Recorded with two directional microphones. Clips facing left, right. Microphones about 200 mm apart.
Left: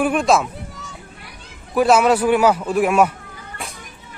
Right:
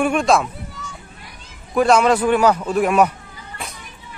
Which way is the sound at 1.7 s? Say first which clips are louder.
Even; 5° left (ahead or behind).